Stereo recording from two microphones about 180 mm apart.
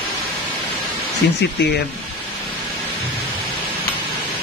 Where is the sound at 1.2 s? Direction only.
70° left (ahead or behind).